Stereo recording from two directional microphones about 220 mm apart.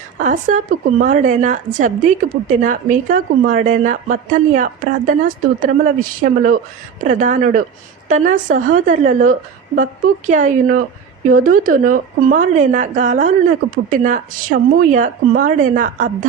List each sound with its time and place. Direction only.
0.2 s a woman's voice: 35° right (ahead or behind)